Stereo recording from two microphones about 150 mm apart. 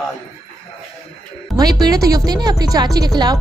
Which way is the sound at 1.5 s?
25° right (ahead or behind).